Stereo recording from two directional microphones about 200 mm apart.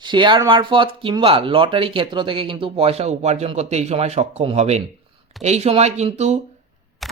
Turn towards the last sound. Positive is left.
turn(degrees=0)  # may be behind; listen again after turning